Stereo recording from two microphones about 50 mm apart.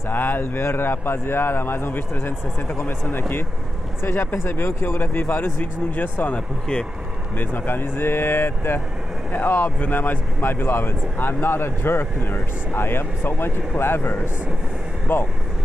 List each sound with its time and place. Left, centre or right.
0.1 s speech: left
3.2 s speech: left
4.0 s speech: left
5.9 s speech: left
6.3 s speech: left
7.3 s speech: left